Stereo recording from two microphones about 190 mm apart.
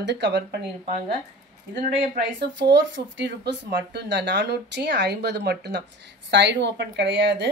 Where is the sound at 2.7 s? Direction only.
75° right (ahead or behind).